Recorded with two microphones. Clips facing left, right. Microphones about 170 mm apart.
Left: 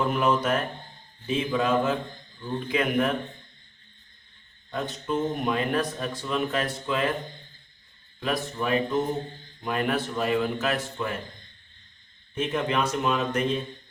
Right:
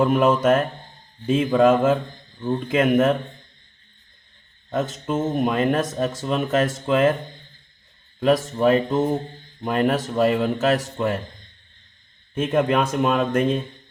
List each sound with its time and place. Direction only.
0.0 s speech: 50° right (ahead or behind)
4.7 s speech: 45° right (ahead or behind)
8.5 s speech: 45° right (ahead or behind)
12.3 s speech: 50° right (ahead or behind)